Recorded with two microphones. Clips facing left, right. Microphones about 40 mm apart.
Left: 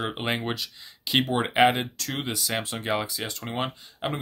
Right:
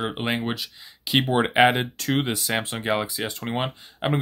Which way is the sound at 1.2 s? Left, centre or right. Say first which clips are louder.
Right 3 dB; centre.